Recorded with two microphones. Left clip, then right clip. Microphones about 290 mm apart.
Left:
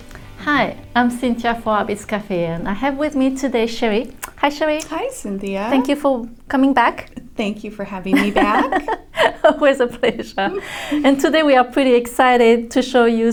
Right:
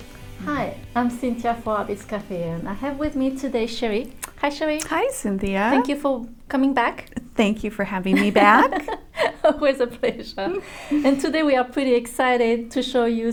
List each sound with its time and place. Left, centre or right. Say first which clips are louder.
0.4 s a woman's voice: left 9 dB; left
4.8 s speech: right 1 dB; right
5.7 s a woman's voice: left 4 dB; left
7.3 s a woman's voice: right 2 dB; right
8.9 s a woman's voice: left 7 dB; left